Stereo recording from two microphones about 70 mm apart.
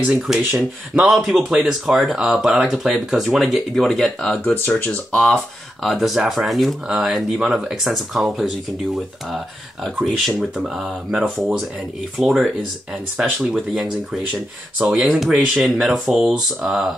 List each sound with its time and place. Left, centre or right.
0.4 s speech: right
1.0 s speech: centre
4.6 s speech: left
5.2 s speech: centre
10.0 s speech: centre